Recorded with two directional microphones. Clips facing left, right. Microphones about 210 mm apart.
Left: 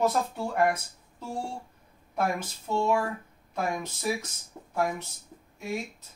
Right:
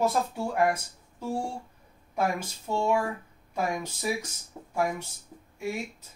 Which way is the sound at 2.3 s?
10° right (ahead or behind).